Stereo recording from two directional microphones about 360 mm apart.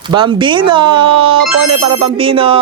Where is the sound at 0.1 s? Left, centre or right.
Centre.